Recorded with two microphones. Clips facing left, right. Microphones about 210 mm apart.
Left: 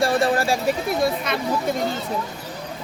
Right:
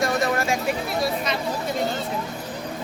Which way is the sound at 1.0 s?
55° left (ahead or behind).